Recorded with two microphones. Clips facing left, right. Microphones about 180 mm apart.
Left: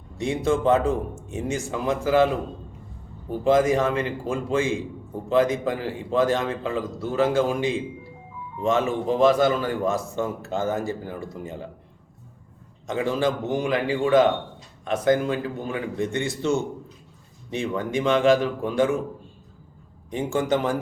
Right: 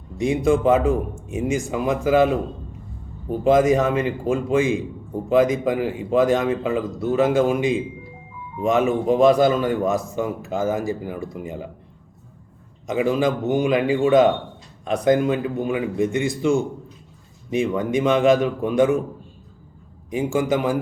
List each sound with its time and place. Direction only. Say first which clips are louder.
0.2 s a man's voice: right 4 dB; 15° right (ahead or behind)
12.9 s a man's voice: right 4 dB; 15° right (ahead or behind)
17.5 s a man's voice: right 5 dB; 15° right (ahead or behind)
20.1 s a man's voice: right 3 dB; 10° right (ahead or behind)